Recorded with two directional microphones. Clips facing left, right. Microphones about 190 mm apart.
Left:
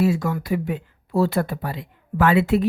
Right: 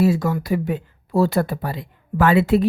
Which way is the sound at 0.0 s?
35° right (ahead or behind).